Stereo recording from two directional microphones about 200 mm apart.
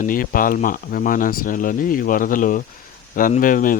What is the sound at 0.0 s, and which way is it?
Speech, 45° left (ahead or behind).